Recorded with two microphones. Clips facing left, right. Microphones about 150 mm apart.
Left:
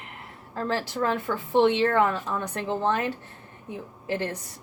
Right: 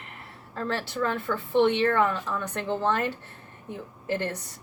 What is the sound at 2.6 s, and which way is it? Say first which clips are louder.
Speech: even; 15° left (ahead or behind).